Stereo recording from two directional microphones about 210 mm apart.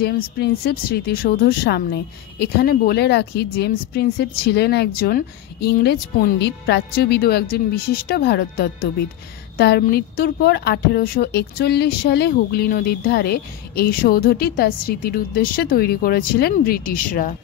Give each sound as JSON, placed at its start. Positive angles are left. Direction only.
{"t": 0.0, "sound": "speech", "side_deg": 50}